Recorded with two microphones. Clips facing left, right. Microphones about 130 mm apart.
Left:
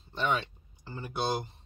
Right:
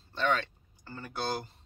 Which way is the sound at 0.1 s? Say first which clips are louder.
Right 1 dB; 15° left (ahead or behind).